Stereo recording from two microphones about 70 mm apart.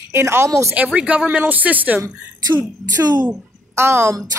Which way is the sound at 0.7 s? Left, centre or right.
Centre.